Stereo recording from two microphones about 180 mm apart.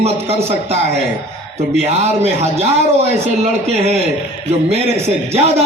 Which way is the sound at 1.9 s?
35° right (ahead or behind).